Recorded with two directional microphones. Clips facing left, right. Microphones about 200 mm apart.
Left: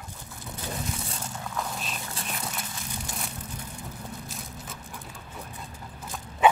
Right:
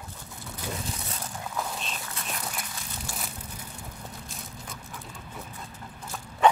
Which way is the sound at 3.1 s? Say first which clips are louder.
Right 1 dB; 20° left (ahead or behind).